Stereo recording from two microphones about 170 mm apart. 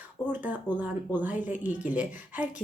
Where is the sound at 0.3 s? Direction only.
10° right (ahead or behind).